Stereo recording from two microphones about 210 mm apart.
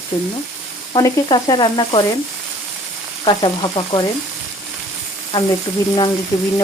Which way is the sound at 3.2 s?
20° left (ahead or behind).